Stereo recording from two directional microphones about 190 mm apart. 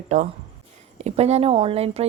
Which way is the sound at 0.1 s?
40° right (ahead or behind).